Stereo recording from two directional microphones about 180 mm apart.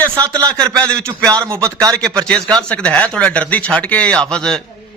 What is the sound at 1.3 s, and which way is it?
Speech, 20° right (ahead or behind).